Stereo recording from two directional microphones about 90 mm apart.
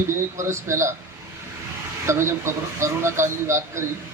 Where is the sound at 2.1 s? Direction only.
30° right (ahead or behind).